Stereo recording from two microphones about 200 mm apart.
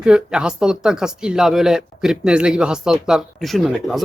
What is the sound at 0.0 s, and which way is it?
Speech, 5° right (ahead or behind).